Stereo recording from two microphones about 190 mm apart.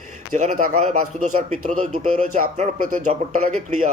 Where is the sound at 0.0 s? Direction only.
45° right (ahead or behind).